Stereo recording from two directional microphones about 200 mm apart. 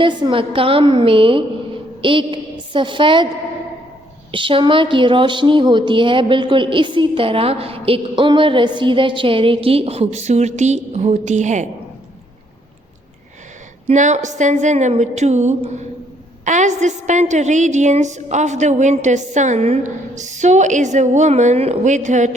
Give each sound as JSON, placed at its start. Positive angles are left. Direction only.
{"t": 0.0, "sound": "a woman's voice", "side_deg": -25}
{"t": 4.3, "sound": "a woman's voice", "side_deg": -25}
{"t": 13.8, "sound": "a woman's voice", "side_deg": -35}